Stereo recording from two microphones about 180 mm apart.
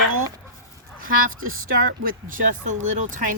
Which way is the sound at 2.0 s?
50° right (ahead or behind).